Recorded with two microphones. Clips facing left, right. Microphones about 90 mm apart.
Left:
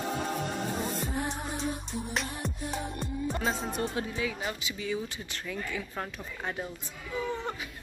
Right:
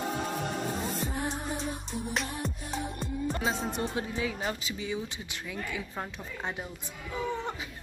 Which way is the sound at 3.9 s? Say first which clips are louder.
Even; 30° right (ahead or behind).